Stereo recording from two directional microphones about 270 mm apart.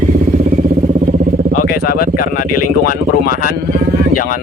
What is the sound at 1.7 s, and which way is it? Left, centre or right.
Speech, left.